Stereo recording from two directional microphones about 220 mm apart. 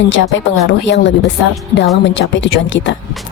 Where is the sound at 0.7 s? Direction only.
55° left (ahead or behind).